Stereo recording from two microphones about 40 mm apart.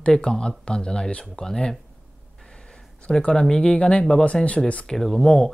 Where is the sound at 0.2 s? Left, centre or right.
Left.